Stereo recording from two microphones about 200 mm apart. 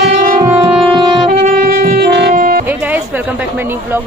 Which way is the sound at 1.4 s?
45° right (ahead or behind).